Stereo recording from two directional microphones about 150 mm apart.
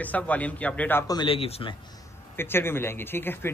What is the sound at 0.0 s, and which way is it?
Speech, 10° left (ahead or behind).